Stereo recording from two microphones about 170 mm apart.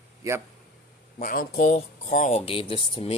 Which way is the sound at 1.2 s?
50° left (ahead or behind).